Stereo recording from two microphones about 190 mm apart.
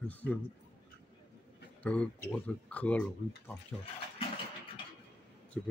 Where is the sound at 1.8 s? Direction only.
5° left (ahead or behind).